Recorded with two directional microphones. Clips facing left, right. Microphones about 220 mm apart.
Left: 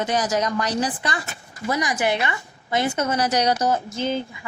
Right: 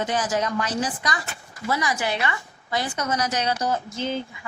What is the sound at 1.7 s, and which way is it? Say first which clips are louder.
A woman's voice: left 3 dB; 20° left (ahead or behind).